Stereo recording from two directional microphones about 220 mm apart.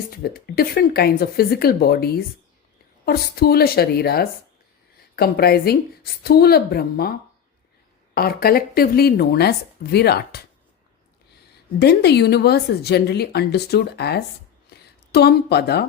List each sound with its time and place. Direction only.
0.1 s a woman's voice: 45° left (ahead or behind)
11.8 s a woman's voice: 50° left (ahead or behind)